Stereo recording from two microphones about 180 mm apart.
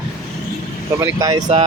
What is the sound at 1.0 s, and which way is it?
Speech, 20° right (ahead or behind).